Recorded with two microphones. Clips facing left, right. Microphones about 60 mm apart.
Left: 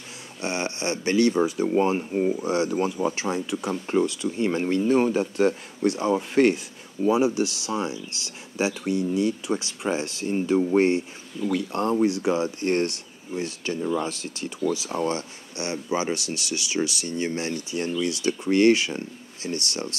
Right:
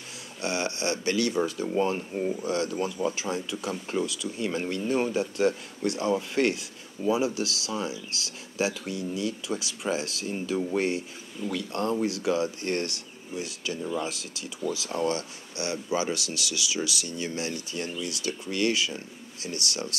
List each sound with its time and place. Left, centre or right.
0.4 s speech: left
14.8 s speech: left